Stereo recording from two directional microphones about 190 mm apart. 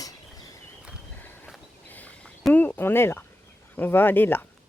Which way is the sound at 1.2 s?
5° left (ahead or behind).